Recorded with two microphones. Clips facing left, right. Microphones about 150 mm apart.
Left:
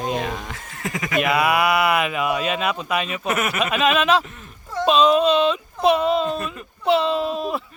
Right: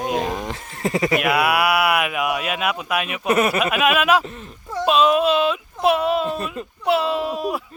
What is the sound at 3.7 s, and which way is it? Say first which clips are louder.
Speech: left 2 dB; 10° right (ahead or behind).